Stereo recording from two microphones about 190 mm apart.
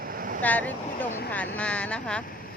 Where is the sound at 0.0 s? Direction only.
50° right (ahead or behind).